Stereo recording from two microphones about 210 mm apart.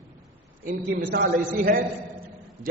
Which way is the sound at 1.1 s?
40° right (ahead or behind).